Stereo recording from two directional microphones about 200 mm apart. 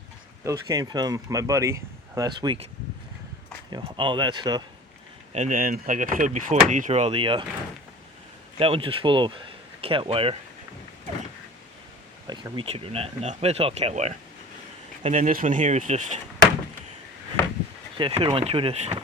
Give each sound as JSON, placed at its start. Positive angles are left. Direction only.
{"t": 0.4, "sound": "speech", "side_deg": -15}
{"t": 3.7, "sound": "speech", "side_deg": -20}
{"t": 5.3, "sound": "speech", "side_deg": -40}
{"t": 8.5, "sound": "speech", "side_deg": -30}
{"t": 12.3, "sound": "speech", "side_deg": -25}
{"t": 17.9, "sound": "speech", "side_deg": -25}